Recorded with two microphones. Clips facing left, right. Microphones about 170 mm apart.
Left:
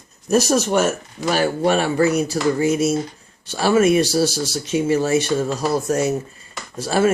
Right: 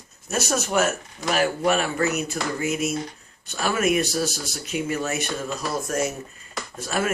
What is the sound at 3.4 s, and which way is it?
Speech, 30° left (ahead or behind).